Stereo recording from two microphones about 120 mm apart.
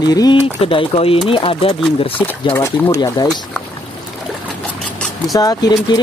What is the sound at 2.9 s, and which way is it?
Speech, 30° left (ahead or behind).